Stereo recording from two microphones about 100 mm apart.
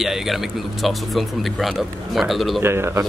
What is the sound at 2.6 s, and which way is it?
Speech, 25° right (ahead or behind).